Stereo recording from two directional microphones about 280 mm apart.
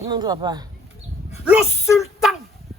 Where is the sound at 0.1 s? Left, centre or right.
Centre.